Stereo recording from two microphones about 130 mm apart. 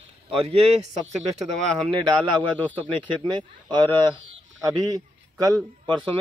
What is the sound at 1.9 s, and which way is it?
Speech, 35° right (ahead or behind).